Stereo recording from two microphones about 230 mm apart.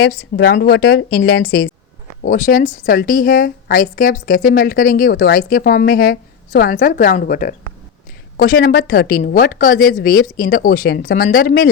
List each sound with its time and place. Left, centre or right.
0.0 s a woman's voice: left